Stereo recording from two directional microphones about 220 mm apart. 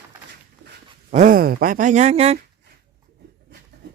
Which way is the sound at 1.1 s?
35° right (ahead or behind).